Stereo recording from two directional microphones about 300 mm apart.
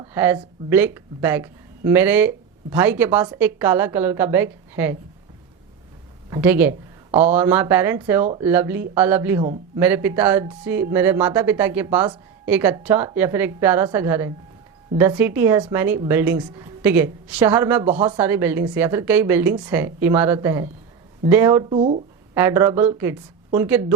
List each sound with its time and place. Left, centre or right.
0.0 s speech: centre
6.3 s speech: centre
9.4 s a man's voice: centre
9.8 s speech: centre
17.8 s speech: centre
18.2 s speech: centre
22.4 s speech: centre